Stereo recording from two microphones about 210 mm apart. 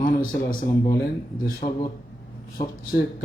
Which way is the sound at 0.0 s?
40° left (ahead or behind).